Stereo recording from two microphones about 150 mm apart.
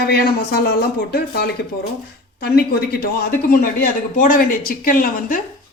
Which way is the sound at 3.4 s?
70° left (ahead or behind).